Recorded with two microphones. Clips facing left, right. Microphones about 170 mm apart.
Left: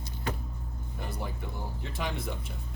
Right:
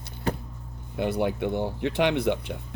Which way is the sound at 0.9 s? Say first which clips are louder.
Right 13 dB; 75° right (ahead or behind).